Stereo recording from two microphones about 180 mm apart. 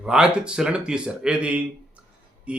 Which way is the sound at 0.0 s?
5° right (ahead or behind).